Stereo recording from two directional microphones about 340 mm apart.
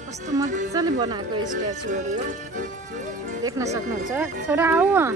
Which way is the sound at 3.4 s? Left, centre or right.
Centre.